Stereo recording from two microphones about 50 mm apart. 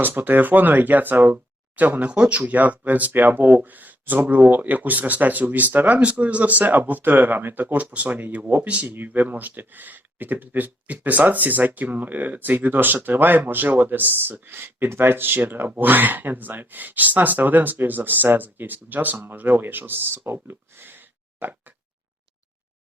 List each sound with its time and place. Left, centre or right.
0.0 s speech: right
2.0 s speech: right
2.4 s speech: right
8.6 s speech: right